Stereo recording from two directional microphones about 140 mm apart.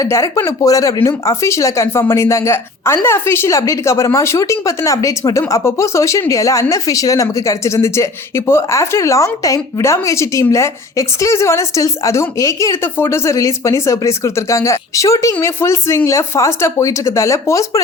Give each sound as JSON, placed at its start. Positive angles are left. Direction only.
{"t": 0.0, "sound": "speech", "side_deg": 20}